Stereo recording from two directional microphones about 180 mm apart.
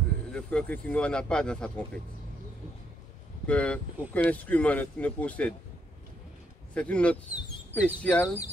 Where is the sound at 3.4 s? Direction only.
5° left (ahead or behind).